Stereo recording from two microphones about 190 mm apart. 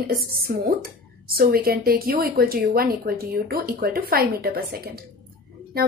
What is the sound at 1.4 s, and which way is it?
A woman's voice, 50° right (ahead or behind).